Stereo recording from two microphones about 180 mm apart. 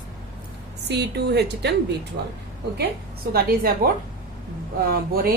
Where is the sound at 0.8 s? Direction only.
65° right (ahead or behind).